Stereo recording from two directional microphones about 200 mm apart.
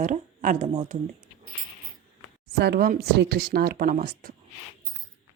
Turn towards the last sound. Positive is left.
turn(degrees=-45)  # may be behind; listen again after turning